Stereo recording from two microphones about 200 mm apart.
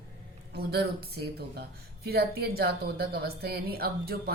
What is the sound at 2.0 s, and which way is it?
Speech, 50° right (ahead or behind).